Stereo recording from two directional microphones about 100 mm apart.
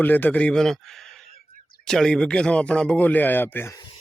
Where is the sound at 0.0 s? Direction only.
20° left (ahead or behind).